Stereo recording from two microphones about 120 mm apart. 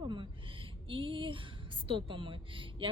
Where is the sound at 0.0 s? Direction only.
40° right (ahead or behind).